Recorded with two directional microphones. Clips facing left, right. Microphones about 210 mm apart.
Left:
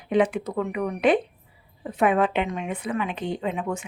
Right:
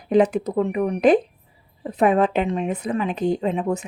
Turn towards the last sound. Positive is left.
turn(degrees=-35)  # may be behind; listen again after turning